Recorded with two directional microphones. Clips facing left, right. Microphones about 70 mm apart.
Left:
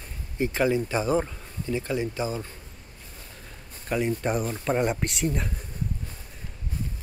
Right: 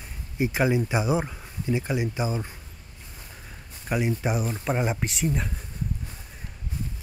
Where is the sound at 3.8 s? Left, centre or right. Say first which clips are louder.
Even; centre.